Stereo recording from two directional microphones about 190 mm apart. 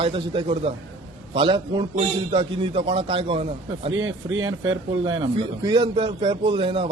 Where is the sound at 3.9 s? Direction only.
90° right.